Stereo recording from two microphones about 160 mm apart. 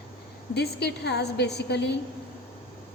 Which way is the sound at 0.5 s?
90° left.